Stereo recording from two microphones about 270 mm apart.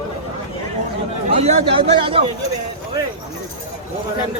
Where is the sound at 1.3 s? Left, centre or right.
Right.